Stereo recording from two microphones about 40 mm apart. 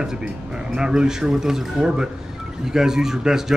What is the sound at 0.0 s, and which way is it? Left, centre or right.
Speech, centre.